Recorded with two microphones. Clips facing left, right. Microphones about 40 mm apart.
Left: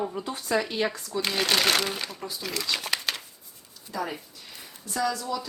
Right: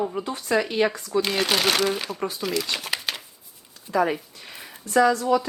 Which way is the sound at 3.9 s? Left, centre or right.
Right.